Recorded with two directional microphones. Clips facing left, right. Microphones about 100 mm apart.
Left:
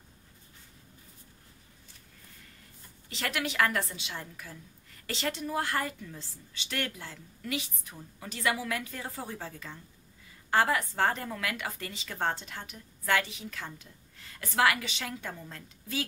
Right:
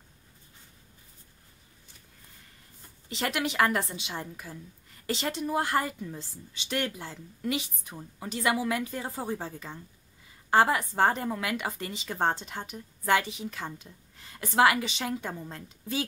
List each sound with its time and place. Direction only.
3.1 s speech: 20° right (ahead or behind)